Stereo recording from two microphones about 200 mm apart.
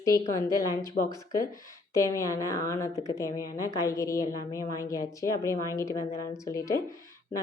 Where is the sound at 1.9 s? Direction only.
15° left (ahead or behind).